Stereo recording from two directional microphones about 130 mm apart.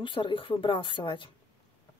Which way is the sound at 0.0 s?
40° left (ahead or behind).